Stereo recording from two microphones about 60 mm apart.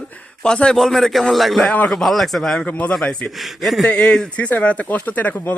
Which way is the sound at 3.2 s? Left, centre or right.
Centre.